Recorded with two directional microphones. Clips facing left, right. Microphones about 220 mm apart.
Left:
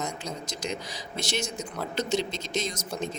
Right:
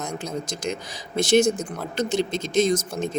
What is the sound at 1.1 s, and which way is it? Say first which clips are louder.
Speech: right 14 dB; 50° right (ahead or behind).